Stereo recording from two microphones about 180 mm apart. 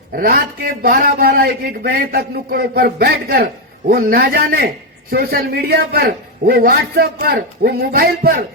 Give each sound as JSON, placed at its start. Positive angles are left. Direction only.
{"t": 0.2, "sound": "speech", "side_deg": -55}